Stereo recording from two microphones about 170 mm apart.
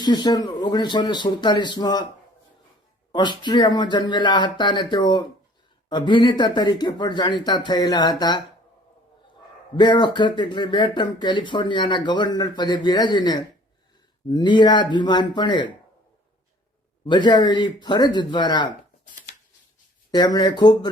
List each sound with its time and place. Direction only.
0.0 s speech: 25° left (ahead or behind)
3.1 s speech: 25° left (ahead or behind)
9.7 s speech: 25° left (ahead or behind)
17.1 s speech: 25° left (ahead or behind)
20.1 s speech: 25° left (ahead or behind)